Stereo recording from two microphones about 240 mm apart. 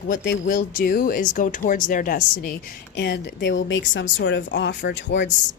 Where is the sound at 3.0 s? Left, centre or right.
Left.